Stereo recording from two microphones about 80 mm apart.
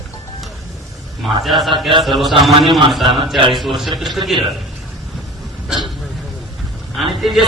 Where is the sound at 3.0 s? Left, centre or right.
Right.